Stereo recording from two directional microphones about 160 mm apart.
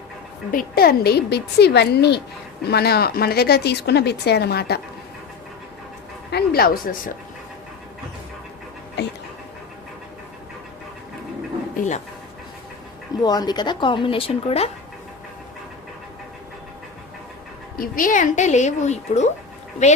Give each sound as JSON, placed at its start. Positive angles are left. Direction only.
{"t": 0.5, "sound": "speech", "side_deg": 70}
{"t": 6.3, "sound": "speech", "side_deg": 70}
{"t": 9.0, "sound": "speech", "side_deg": 90}
{"t": 11.8, "sound": "speech", "side_deg": 45}
{"t": 13.2, "sound": "a woman's voice", "side_deg": 25}
{"t": 17.7, "sound": "speech", "side_deg": 60}